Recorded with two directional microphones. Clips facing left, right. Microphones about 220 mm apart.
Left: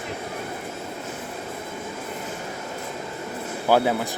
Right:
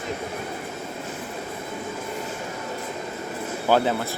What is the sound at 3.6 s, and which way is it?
Speech, 10° left (ahead or behind).